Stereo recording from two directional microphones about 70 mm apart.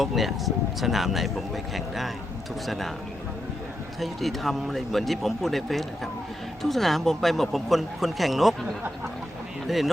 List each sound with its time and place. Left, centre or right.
0.0 s speech: centre
4.0 s speech: centre
9.6 s speech: centre